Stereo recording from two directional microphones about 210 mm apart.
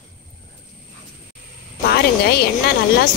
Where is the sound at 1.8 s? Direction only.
50° left (ahead or behind).